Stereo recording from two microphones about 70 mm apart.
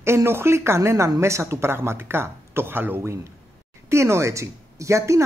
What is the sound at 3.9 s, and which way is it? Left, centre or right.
Speech, right.